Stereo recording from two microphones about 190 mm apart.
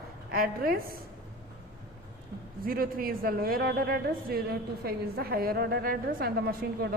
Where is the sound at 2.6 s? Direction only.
50° right (ahead or behind).